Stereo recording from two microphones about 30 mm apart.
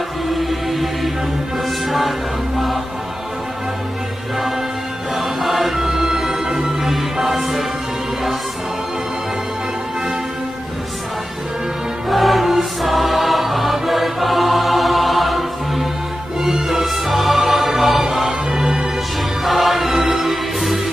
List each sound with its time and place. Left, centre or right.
0.3 s music: centre
5.1 s music: centre
12.1 s music: centre
18.6 s music: right
19.4 s music: centre